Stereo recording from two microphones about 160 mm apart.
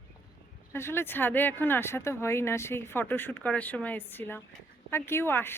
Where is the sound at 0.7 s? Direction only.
15° left (ahead or behind).